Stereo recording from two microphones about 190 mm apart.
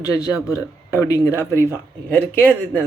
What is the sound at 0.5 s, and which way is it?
Speech, 15° left (ahead or behind).